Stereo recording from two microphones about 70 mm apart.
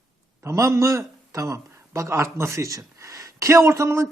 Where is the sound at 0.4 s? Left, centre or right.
Right.